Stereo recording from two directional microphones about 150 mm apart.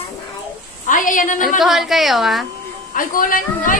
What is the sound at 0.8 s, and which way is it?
Speech, 60° left (ahead or behind).